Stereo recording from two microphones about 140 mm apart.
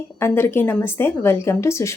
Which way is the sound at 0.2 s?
15° left (ahead or behind).